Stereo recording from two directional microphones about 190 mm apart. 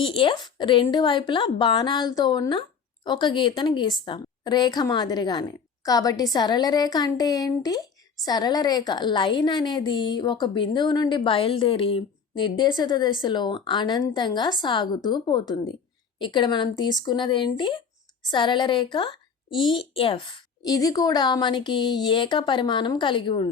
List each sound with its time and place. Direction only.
0.0 s a woman's voice: 25° left (ahead or behind)